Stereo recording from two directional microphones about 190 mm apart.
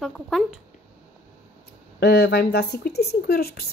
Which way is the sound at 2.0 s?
60° left (ahead or behind).